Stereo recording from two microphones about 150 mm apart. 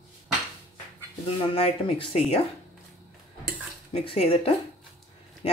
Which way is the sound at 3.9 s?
40° left (ahead or behind).